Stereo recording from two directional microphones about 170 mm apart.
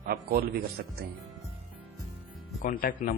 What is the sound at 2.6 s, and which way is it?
Speech, 55° left (ahead or behind).